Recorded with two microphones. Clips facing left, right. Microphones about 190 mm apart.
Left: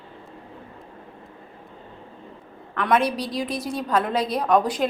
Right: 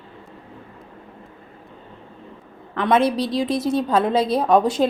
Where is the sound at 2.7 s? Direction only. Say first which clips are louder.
Right 4 dB; 25° right (ahead or behind).